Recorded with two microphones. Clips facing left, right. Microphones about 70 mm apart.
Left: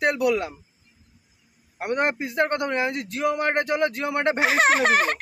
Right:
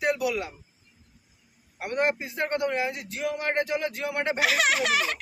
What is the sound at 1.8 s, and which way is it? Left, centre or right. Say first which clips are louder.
A man's voice: left 2 dB; left.